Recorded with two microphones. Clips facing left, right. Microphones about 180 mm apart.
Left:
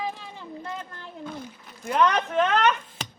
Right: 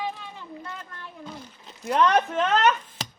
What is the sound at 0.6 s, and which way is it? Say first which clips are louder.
Speech: left 3 dB; 30° left (ahead or behind).